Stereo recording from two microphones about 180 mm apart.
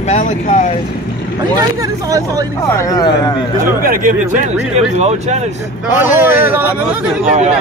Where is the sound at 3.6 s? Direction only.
50° right (ahead or behind).